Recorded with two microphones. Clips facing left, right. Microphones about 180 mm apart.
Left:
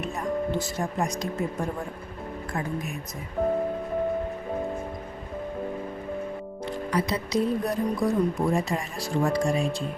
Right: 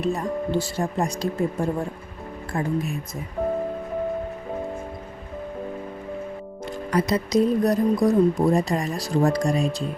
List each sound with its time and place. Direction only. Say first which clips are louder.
0.0 s speech: right 3 dB; 35° right (ahead or behind)
6.7 s speech: right 4 dB; 45° right (ahead or behind)